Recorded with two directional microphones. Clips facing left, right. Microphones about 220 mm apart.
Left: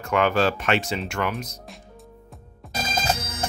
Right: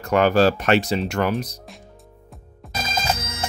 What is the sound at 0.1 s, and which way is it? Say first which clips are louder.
Speech: right 4 dB; 40° right (ahead or behind).